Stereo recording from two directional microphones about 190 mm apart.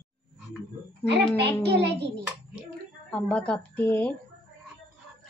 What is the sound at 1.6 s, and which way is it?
Speech, 65° right (ahead or behind).